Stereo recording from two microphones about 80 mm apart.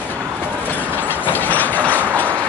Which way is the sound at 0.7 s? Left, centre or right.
Left.